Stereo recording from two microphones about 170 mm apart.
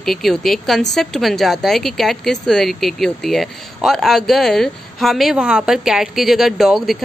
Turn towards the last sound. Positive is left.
turn(degrees=0)  # may be behind; listen again after turning